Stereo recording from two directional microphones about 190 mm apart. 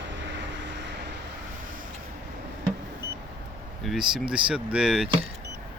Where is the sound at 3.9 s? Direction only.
5° right (ahead or behind).